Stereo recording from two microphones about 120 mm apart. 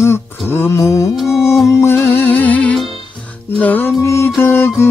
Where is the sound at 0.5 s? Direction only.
20° left (ahead or behind).